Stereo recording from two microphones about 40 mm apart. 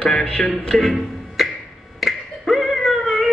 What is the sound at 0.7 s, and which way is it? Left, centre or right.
Music, centre.